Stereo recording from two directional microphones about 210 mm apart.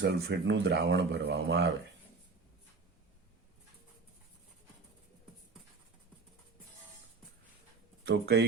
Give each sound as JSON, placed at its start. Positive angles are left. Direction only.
{"t": 0.0, "sound": "speech", "side_deg": -55}
{"t": 8.0, "sound": "speech", "side_deg": -55}